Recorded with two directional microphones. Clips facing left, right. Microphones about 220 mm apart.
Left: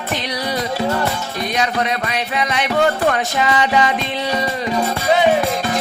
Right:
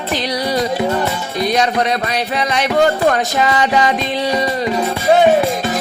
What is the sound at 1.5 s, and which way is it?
Speech, 35° right (ahead or behind).